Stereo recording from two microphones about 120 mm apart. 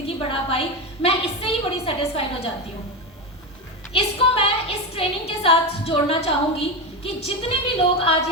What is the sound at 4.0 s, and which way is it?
A woman's voice, 55° left (ahead or behind).